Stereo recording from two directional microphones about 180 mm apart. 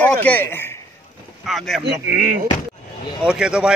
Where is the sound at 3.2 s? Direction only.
5° right (ahead or behind).